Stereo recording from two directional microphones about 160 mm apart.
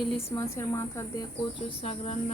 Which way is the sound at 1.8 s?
40° left (ahead or behind).